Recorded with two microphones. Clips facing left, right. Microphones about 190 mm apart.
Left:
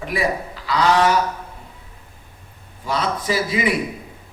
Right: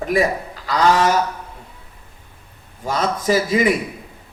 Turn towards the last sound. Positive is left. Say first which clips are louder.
# right 4 dB
turn(degrees=-45)  # may be behind; listen again after turning